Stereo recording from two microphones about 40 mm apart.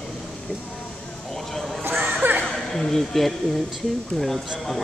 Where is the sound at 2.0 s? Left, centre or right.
Right.